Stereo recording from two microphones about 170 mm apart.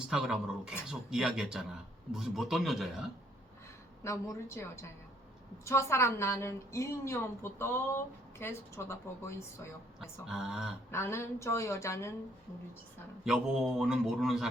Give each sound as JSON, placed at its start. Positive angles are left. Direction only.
{"t": 0.1, "sound": "mantra", "side_deg": -5}
{"t": 4.0, "sound": "a woman's voice", "side_deg": 15}
{"t": 10.0, "sound": "mantra", "side_deg": -5}
{"t": 10.9, "sound": "a woman's voice", "side_deg": 15}
{"t": 13.2, "sound": "mantra", "side_deg": -5}